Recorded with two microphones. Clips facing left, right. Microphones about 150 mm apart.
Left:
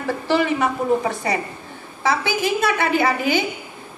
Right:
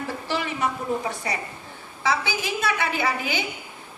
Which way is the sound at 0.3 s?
60° left (ahead or behind).